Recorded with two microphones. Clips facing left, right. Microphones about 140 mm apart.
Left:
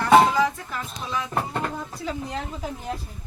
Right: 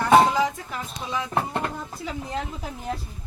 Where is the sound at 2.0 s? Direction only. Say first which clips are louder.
Even; 5° right (ahead or behind).